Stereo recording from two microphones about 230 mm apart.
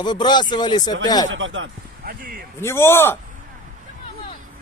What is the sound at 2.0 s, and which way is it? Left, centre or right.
Speech, right.